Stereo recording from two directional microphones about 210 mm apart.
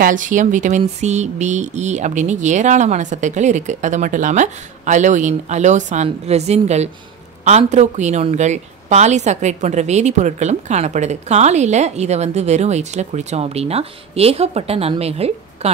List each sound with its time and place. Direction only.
0.0 s a woman's voice: 40° right (ahead or behind)